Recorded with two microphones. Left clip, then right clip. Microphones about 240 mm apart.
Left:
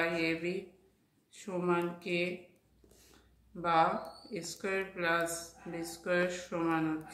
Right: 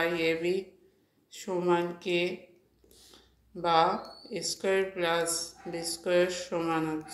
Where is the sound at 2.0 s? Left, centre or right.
Right.